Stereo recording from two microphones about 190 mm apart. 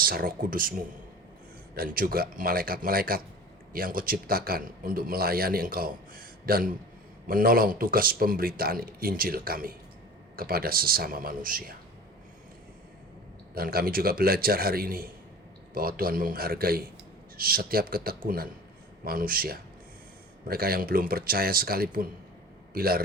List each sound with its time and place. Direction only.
0.0 s a man's voice: 50° right (ahead or behind)
1.7 s a man's voice: 50° right (ahead or behind)
13.5 s a man's voice: 50° right (ahead or behind)